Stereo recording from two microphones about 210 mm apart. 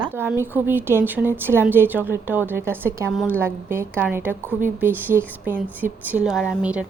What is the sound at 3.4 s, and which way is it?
A woman's voice, 10° right (ahead or behind).